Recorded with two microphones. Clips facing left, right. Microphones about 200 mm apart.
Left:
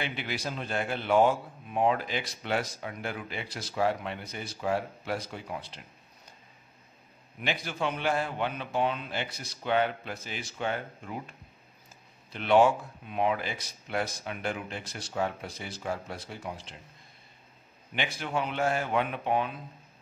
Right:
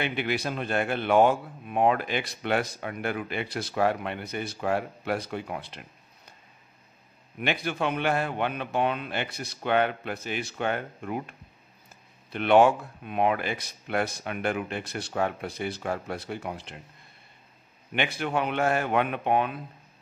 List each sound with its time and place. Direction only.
0.0 s speech: 60° right (ahead or behind)
7.3 s speech: 60° right (ahead or behind)
17.9 s speech: 60° right (ahead or behind)